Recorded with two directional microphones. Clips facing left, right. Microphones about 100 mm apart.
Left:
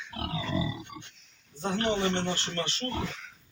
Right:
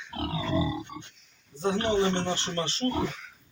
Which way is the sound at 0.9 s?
30° right (ahead or behind).